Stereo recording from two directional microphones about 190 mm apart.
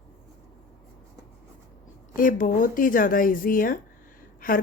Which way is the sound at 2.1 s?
45° left (ahead or behind).